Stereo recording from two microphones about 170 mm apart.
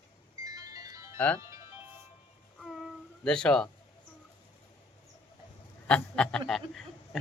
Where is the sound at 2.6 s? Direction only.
Centre (ahead or behind).